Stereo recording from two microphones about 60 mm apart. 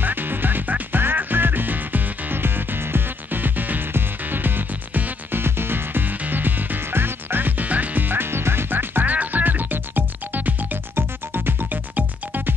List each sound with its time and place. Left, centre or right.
0.0 s music: right